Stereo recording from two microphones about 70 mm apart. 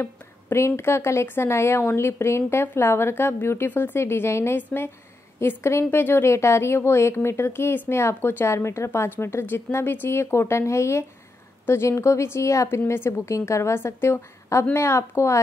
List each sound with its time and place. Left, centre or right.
0.0 s speech: left